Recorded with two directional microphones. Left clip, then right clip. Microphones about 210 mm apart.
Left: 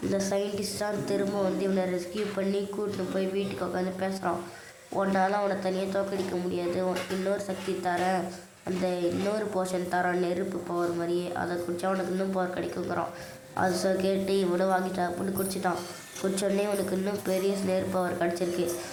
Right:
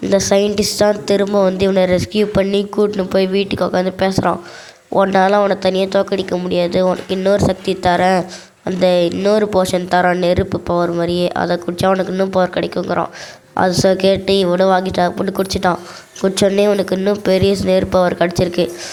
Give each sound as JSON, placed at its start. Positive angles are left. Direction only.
{"t": 0.1, "sound": "speech", "side_deg": -40}